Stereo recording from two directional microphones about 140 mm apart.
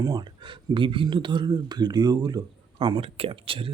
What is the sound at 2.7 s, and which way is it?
Speech, 40° right (ahead or behind).